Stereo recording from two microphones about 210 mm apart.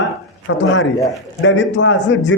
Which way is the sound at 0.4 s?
65° left (ahead or behind).